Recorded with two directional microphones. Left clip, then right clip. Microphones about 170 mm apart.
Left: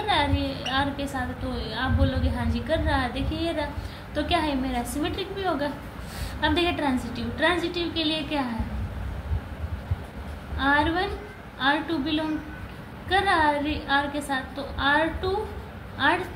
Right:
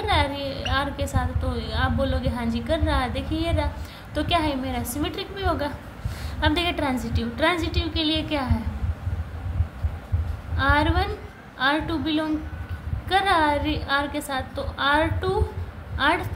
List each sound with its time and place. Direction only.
0.0 s a woman's voice: 40° right (ahead or behind)
10.6 s a woman's voice: 45° right (ahead or behind)